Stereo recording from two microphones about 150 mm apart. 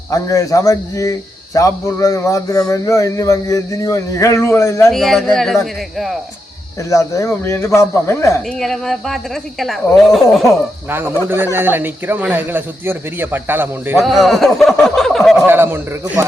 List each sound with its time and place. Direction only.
0.1 s a man's voice: 20° left (ahead or behind)
4.9 s speech: centre (ahead or behind)
6.9 s a man's voice: 20° left (ahead or behind)
8.4 s speech: centre (ahead or behind)
10.8 s speech: 15° right (ahead or behind)
14.0 s speech: centre (ahead or behind)
15.4 s speech: 15° right (ahead or behind)